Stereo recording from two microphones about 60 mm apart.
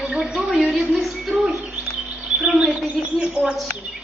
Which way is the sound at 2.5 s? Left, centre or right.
Right.